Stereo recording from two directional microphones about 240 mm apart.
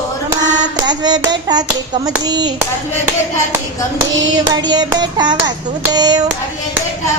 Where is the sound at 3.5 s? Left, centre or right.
Centre.